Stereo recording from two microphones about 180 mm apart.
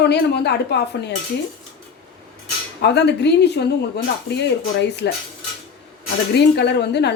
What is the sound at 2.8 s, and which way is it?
A woman's voice, 70° left (ahead or behind).